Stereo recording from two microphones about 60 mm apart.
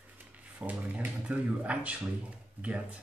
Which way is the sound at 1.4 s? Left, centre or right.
Right.